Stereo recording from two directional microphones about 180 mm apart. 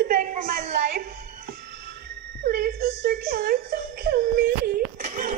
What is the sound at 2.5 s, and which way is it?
Whimper, 65° right (ahead or behind).